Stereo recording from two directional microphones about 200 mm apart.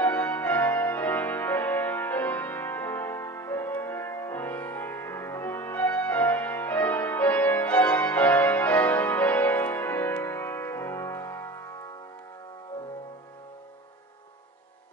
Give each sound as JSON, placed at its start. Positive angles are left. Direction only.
{"t": 0.0, "sound": "music", "side_deg": 10}